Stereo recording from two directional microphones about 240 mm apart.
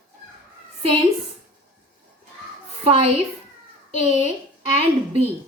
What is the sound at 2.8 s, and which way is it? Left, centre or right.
Speech, right.